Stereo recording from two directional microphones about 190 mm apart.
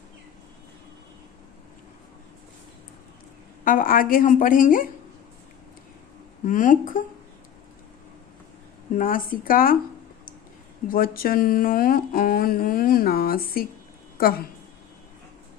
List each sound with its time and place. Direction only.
3.6 s speech: 45° left (ahead or behind)
6.4 s speech: 45° left (ahead or behind)
8.9 s speech: 45° left (ahead or behind)
10.8 s a woman's voice: 50° left (ahead or behind)